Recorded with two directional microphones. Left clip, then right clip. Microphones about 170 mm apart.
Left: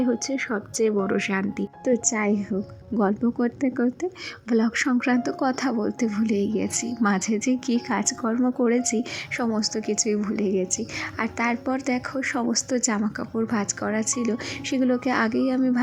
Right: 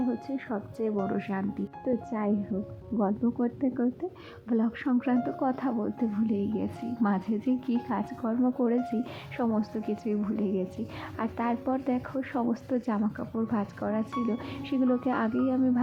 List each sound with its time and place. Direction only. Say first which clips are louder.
0.0 s a woman's voice: left 8 dB; 20° left (ahead or behind)